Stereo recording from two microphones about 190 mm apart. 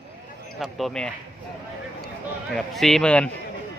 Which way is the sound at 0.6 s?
Centre (ahead or behind).